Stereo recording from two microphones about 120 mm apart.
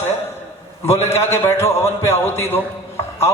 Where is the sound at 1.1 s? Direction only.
20° left (ahead or behind).